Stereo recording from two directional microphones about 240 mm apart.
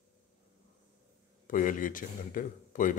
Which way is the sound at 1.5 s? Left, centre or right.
Left.